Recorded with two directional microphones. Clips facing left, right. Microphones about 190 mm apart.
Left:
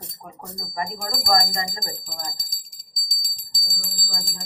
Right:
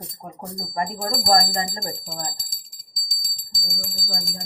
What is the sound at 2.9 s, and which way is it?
Bell, 25° right (ahead or behind).